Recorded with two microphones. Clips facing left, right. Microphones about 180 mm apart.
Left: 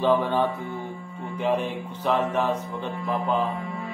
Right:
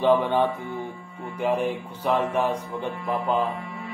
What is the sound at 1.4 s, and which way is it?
Music, 10° right (ahead or behind).